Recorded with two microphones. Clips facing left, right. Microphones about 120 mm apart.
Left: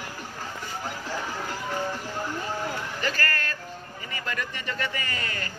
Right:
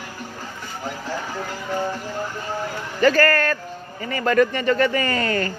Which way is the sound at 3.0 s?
55° right (ahead or behind).